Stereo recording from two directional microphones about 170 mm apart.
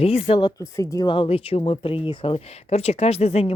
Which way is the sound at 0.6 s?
20° left (ahead or behind).